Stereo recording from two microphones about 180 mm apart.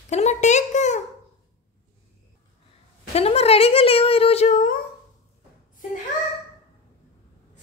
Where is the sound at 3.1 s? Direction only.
35° left (ahead or behind).